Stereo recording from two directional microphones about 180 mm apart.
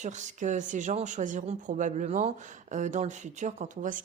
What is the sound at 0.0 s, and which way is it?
A woman's voice, 40° right (ahead or behind).